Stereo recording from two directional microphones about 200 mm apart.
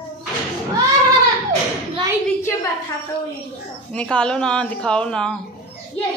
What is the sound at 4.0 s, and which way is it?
A woman's voice, 5° left (ahead or behind).